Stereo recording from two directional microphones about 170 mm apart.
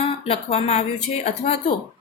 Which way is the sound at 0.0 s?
35° left (ahead or behind).